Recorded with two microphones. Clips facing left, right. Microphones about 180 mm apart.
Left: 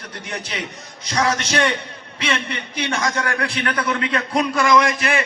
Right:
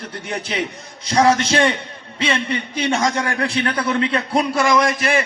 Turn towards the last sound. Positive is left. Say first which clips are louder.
# even
turn(degrees=-30)  # may be behind; listen again after turning